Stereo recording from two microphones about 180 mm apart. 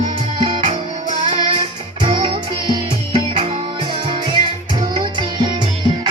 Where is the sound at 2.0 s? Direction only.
30° right (ahead or behind).